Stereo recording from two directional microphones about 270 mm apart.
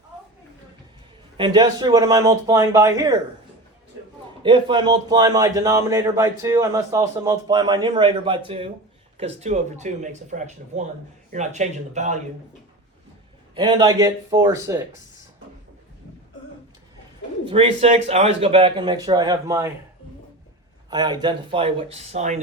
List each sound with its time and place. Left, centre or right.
1.4 s a man's voice: centre
4.4 s a man's voice: centre
13.6 s a man's voice: centre
17.4 s speech: centre
20.9 s speech: centre